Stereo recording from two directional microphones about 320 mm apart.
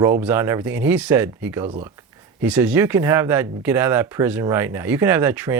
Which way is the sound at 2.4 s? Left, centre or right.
Centre.